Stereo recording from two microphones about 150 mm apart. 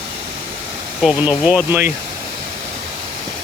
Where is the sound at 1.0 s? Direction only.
5° right (ahead or behind).